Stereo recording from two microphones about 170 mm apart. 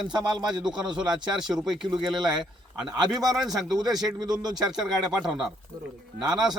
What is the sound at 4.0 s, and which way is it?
Speech, 25° right (ahead or behind).